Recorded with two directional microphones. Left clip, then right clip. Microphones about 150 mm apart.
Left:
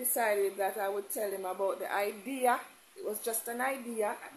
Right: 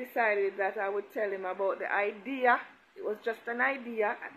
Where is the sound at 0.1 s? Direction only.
15° left (ahead or behind).